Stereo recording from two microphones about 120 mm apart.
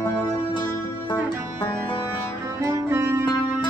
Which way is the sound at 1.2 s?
35° left (ahead or behind).